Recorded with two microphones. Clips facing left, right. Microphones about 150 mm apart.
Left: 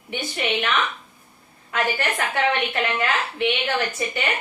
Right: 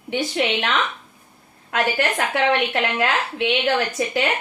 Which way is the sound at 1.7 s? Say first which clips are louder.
Right 3 dB; 90° right.